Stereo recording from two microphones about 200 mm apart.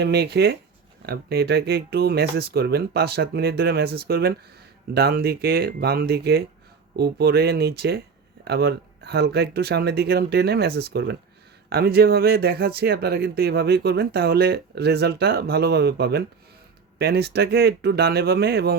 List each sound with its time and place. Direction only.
0.0 s speech: 55° right (ahead or behind)